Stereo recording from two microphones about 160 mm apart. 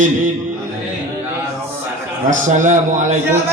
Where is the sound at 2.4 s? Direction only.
50° right (ahead or behind).